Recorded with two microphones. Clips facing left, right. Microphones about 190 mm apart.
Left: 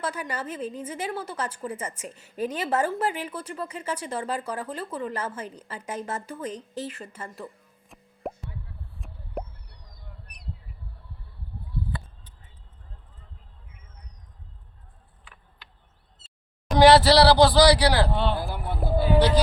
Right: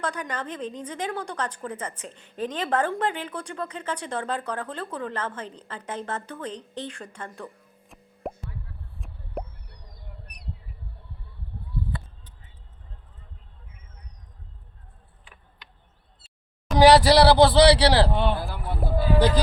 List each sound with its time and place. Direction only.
0.0 s a woman's voice: 5° left (ahead or behind)
9.0 s a sound: centre (ahead or behind)
16.7 s a man's voice: 10° right (ahead or behind); by 18.1 s 30° right (ahead or behind)
18.1 s speech: 15° right (ahead or behind)
18.3 s speech: 15° left (ahead or behind)
18.8 s vehicle: centre (ahead or behind)